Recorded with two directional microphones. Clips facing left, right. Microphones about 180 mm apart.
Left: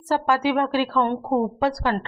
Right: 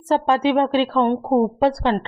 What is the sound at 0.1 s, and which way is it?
A woman's voice, 25° right (ahead or behind).